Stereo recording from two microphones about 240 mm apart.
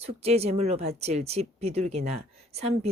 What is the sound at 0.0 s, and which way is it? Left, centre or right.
Speech, right.